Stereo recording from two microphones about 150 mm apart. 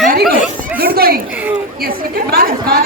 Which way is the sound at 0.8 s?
90° right.